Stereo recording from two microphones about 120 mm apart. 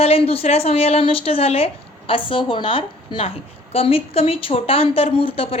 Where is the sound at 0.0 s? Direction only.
55° left (ahead or behind).